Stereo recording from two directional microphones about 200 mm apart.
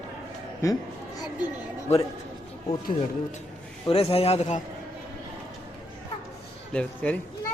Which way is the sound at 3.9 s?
30° left (ahead or behind).